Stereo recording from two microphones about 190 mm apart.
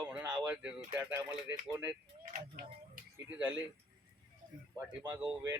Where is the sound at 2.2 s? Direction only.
45° right (ahead or behind).